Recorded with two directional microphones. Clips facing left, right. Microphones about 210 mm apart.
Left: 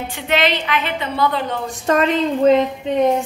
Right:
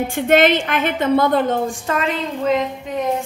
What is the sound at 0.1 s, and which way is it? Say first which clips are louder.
A woman's voice: right 5 dB; 50° right (ahead or behind).